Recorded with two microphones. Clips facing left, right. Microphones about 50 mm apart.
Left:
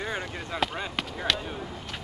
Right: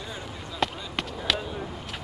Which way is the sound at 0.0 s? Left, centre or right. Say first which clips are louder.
Left 5 dB; left.